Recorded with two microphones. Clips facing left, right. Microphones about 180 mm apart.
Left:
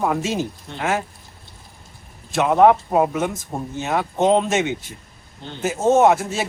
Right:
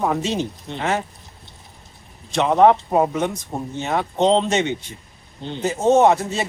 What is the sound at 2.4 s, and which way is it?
Speech, 5° left (ahead or behind).